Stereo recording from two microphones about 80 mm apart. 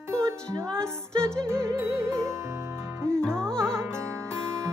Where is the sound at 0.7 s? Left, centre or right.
Centre.